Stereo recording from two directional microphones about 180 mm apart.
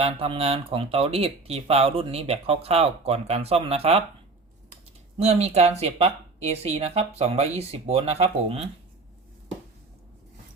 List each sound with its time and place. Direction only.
0.0 s speech: 35° right (ahead or behind)
5.1 s speech: 35° right (ahead or behind)